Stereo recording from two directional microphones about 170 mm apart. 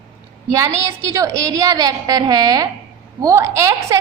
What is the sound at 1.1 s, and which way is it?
A woman's voice, 20° right (ahead or behind).